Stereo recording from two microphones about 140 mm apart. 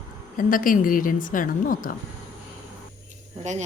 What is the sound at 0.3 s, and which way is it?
A woman's voice, 75° left (ahead or behind).